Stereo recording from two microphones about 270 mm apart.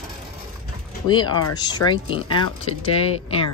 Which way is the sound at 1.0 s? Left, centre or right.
Centre.